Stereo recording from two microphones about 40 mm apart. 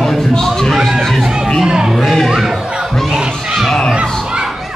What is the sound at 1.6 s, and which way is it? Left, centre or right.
Speech, centre.